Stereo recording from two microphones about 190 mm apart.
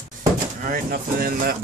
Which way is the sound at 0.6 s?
50° right (ahead or behind).